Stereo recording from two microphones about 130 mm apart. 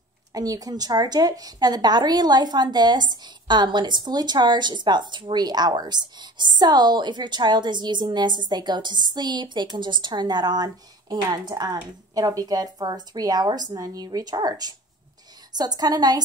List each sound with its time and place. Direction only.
0.3 s a woman's voice: 30° right (ahead or behind)